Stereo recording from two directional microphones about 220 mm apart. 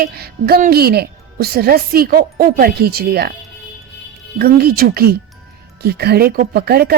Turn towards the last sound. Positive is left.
turn(degrees=-45)  # may be behind; listen again after turning